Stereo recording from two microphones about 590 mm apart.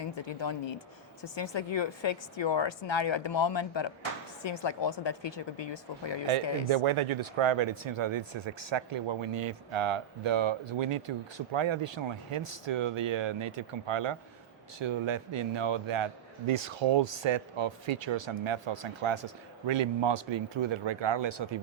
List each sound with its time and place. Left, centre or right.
0.3 s a woman's voice: left
6.3 s speech: right
16.5 s speech: right